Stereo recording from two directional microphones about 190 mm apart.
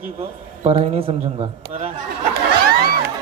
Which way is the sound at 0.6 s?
30° right (ahead or behind).